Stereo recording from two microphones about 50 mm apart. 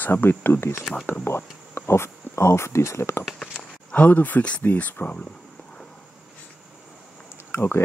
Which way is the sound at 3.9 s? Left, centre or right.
Left.